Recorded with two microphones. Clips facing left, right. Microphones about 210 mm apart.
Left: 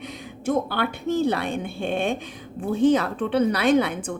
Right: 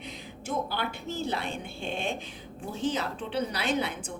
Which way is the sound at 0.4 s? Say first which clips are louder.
Left 8 dB; 60° left (ahead or behind).